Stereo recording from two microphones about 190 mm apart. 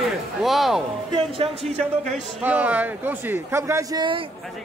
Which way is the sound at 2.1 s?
Centre (ahead or behind).